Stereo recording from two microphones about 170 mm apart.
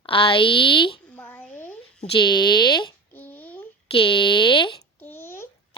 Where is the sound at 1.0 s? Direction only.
10° left (ahead or behind).